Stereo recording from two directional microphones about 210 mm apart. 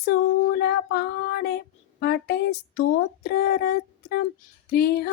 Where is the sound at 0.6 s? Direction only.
50° left (ahead or behind).